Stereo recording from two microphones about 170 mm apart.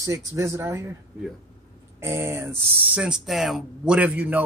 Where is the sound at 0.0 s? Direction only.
15° right (ahead or behind).